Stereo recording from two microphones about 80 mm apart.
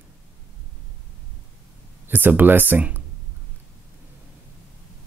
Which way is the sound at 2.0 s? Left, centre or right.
Right.